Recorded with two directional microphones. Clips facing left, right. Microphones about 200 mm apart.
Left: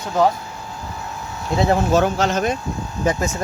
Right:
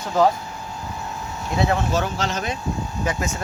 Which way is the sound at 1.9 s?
50° left (ahead or behind).